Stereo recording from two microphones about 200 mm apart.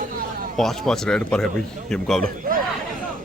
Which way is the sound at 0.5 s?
Centre (ahead or behind).